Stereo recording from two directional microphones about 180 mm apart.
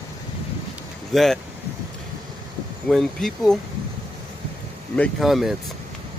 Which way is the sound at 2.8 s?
Centre (ahead or behind).